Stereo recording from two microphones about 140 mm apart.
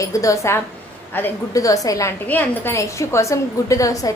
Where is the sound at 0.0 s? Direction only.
20° left (ahead or behind).